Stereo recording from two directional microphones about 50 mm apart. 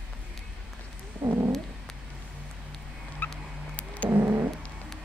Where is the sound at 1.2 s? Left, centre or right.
Right.